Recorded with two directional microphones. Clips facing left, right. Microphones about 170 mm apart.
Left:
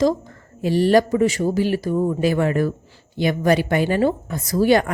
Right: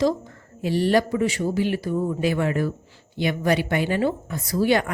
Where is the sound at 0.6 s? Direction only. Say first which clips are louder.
Left 4 dB; 45° left (ahead or behind).